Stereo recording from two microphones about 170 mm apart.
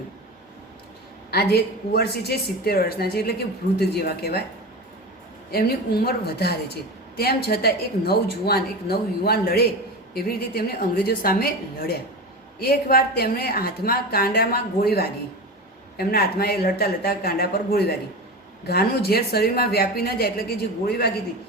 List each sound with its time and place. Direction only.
1.3 s speech: 65° left (ahead or behind)
5.5 s a woman's voice: 65° left (ahead or behind)